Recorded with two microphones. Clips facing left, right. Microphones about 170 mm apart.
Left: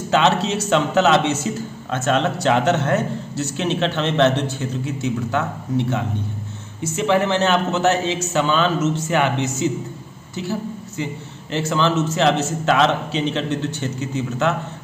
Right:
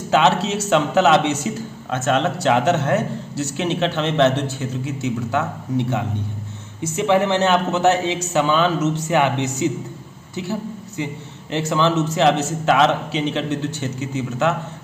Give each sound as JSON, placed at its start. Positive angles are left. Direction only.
{"t": 0.1, "sound": "a man's voice", "side_deg": -5}